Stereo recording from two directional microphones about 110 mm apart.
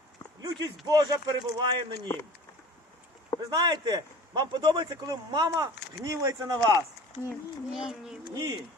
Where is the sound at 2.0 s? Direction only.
20° left (ahead or behind).